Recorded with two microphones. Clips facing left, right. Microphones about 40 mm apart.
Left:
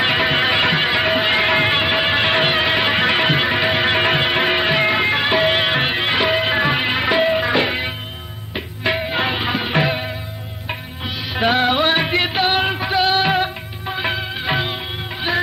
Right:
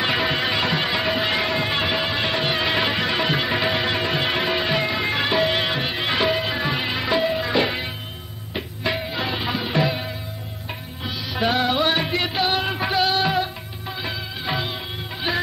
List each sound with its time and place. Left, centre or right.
0.0 s music: left
1.5 s music: left
2.6 s music: left
2.9 s music: left
7.6 s music: left
11.3 s music: left
12.7 s music: centre
13.1 s music of bollywood: left